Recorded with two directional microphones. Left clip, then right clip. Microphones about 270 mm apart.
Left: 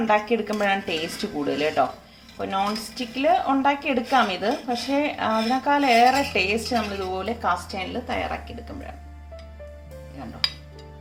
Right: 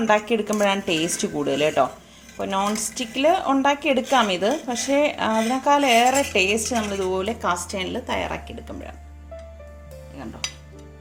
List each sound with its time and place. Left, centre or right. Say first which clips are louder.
0.1 s a woman's voice: right 2 dB; right